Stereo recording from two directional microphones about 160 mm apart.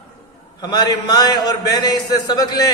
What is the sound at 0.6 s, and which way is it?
A man's voice, 25° left (ahead or behind).